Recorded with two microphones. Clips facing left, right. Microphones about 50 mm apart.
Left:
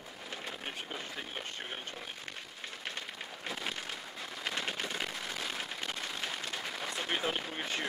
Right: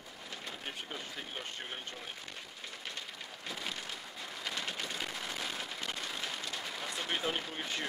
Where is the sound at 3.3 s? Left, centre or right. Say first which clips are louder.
Left 2 dB; centre.